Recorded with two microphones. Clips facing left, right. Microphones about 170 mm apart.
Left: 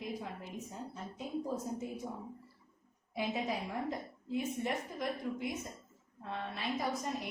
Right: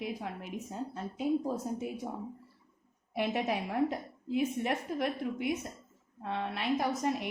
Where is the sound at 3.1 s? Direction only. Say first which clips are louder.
Right 4 dB; 70° right (ahead or behind).